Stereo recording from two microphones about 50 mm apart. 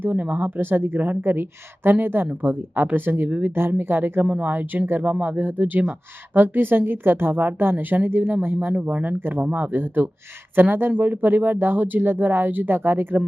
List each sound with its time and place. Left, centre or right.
0.0 s speech: right
0.3 s a woman's voice: right
8.7 s speech: right